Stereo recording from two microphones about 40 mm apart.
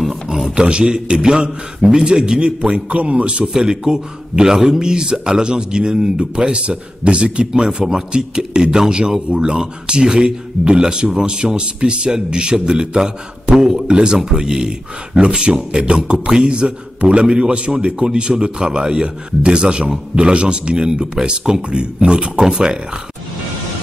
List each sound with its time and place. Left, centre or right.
0.0 s a sound: centre
0.6 s speech: right
3.5 s speech: centre
22.4 s speech: centre